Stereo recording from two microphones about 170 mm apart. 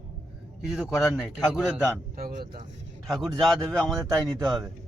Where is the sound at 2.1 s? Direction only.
60° right (ahead or behind).